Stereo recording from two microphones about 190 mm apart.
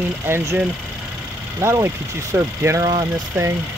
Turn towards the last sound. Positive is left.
turn(degrees=-15)  # may be behind; listen again after turning